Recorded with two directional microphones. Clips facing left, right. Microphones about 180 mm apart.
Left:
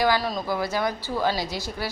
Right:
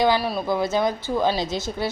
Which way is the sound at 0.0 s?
15° right (ahead or behind).